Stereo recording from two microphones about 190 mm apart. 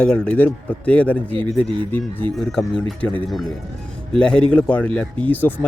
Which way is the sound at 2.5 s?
5° left (ahead or behind).